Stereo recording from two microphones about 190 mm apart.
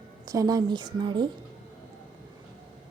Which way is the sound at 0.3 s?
20° right (ahead or behind).